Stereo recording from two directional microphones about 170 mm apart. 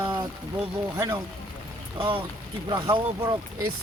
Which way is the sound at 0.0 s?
15° right (ahead or behind).